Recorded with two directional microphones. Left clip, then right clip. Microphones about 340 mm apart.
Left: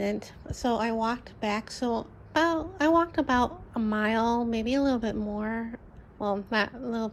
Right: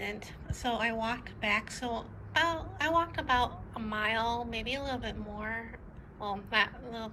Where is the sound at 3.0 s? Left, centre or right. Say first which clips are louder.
Even; left.